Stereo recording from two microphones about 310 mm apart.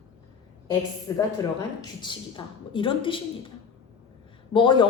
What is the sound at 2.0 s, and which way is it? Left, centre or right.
A woman's voice, centre.